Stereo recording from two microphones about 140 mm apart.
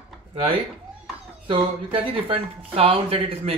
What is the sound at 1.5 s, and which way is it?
Speech, 40° right (ahead or behind).